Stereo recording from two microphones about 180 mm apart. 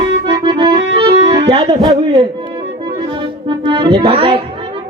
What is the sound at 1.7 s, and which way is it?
Tabla, 30° right (ahead or behind).